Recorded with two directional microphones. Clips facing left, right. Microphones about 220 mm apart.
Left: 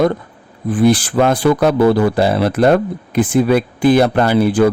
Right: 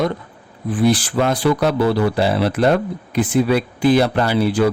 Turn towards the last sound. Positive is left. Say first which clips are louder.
# left 4 dB
turn(degrees=50)  # may be behind; listen again after turning